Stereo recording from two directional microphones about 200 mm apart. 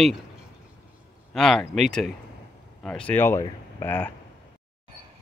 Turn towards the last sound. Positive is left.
turn(degrees=10)  # may be behind; listen again after turning